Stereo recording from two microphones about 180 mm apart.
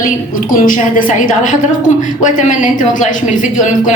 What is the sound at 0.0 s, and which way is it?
A woman's voice, 50° left (ahead or behind).